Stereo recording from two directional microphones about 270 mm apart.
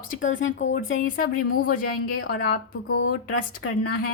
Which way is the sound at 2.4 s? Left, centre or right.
Left.